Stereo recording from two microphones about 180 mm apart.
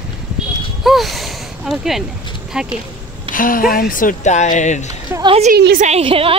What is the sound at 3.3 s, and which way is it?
Speech, 50° left (ahead or behind).